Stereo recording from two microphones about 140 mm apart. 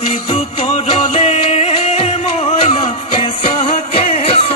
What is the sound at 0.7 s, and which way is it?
Music, 50° left (ahead or behind).